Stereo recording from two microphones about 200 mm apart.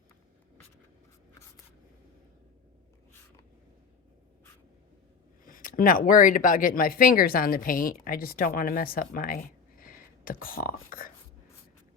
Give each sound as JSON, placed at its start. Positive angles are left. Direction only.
{"t": 5.5, "sound": "speech", "side_deg": 45}